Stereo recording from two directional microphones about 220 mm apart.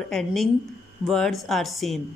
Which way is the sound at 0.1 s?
Centre (ahead or behind).